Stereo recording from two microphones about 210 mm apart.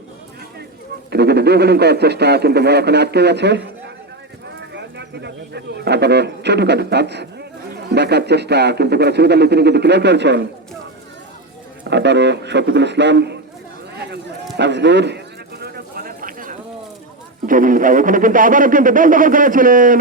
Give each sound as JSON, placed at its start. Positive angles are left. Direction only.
{"t": 1.1, "sound": "speech", "side_deg": -50}
{"t": 4.7, "sound": "speech", "side_deg": -55}
{"t": 11.9, "sound": "a man's voice", "side_deg": -55}
{"t": 14.5, "sound": "a man's voice", "side_deg": -55}
{"t": 15.6, "sound": "a sound", "side_deg": -45}
{"t": 17.4, "sound": "speech", "side_deg": -40}